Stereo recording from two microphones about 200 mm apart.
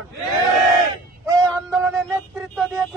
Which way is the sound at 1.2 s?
15° right (ahead or behind).